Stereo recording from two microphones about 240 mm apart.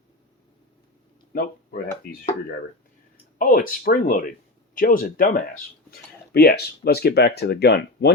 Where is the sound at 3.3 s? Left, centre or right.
Left.